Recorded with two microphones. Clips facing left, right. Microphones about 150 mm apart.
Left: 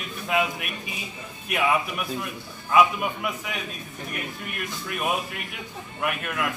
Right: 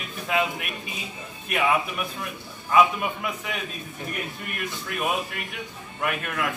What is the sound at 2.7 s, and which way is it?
Speech, centre (ahead or behind).